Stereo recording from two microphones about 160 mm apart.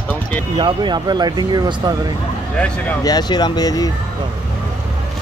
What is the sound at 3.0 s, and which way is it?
Speech, 25° left (ahead or behind).